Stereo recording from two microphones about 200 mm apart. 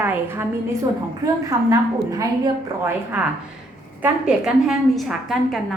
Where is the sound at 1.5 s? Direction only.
15° right (ahead or behind).